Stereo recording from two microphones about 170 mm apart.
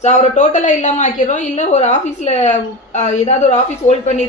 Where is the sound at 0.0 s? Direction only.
45° left (ahead or behind).